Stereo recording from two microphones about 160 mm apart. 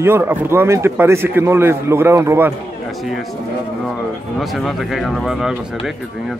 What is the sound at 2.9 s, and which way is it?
Speech, centre (ahead or behind).